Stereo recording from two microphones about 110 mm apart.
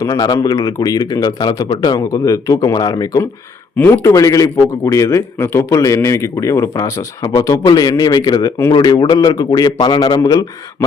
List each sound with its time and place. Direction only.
0.0 s speech: 35° left (ahead or behind)
2.0 s speech: 30° left (ahead or behind)
3.8 s speech: 20° left (ahead or behind)
4.1 s a man's voice: 30° left (ahead or behind)
10.2 s a man's voice: 30° left (ahead or behind)